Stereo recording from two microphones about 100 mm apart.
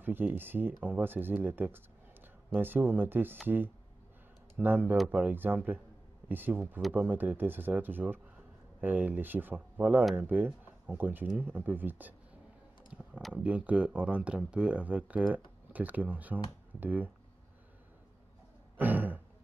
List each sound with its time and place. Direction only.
0.0 s speech: 20° right (ahead or behind)
13.3 s speech: 15° right (ahead or behind)
18.8 s a sound: 15° right (ahead or behind)